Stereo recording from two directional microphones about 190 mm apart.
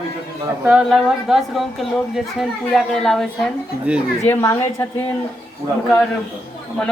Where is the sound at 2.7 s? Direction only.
Centre (ahead or behind).